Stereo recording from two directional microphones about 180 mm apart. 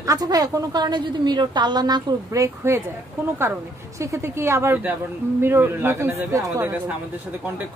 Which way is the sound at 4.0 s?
15° right (ahead or behind).